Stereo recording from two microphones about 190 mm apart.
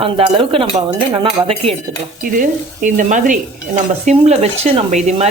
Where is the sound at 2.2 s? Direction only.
45° right (ahead or behind).